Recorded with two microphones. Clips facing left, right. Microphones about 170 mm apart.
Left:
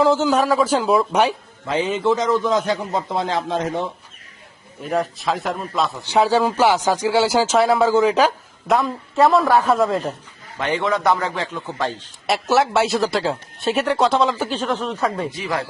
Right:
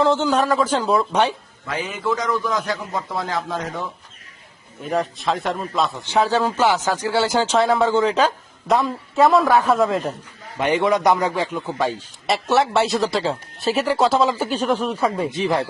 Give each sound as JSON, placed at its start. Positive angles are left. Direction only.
{"t": 0.0, "sound": "a man's voice", "side_deg": 5}
{"t": 1.6, "sound": "a man's voice", "side_deg": 25}
{"t": 4.8, "sound": "speech", "side_deg": 0}
{"t": 6.1, "sound": "a man's voice", "side_deg": 10}
{"t": 10.6, "sound": "a man's voice", "side_deg": -15}
{"t": 12.2, "sound": "speech", "side_deg": 0}
{"t": 15.3, "sound": "speech", "side_deg": -25}